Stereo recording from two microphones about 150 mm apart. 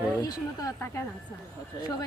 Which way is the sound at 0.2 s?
25° left (ahead or behind).